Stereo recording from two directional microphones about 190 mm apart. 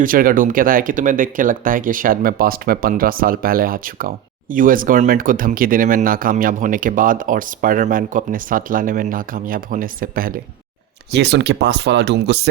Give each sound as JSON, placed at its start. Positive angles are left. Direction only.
{"t": 0.0, "sound": "speech", "side_deg": -50}
{"t": 11.1, "sound": "speech", "side_deg": -65}